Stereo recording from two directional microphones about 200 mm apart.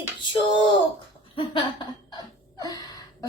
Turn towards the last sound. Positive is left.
turn(degrees=20)  # may be behind; listen again after turning